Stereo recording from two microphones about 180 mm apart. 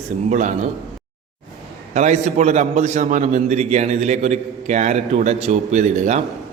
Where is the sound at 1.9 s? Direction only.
40° right (ahead or behind).